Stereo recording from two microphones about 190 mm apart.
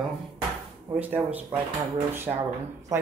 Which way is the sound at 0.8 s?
10° right (ahead or behind).